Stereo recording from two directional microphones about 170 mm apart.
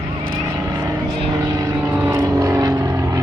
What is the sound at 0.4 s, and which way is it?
Vehicle, 20° right (ahead or behind).